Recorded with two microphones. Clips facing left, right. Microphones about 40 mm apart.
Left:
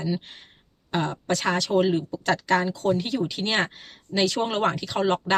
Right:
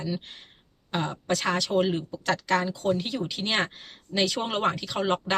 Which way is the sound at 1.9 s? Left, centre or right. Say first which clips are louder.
Left 3 dB; centre.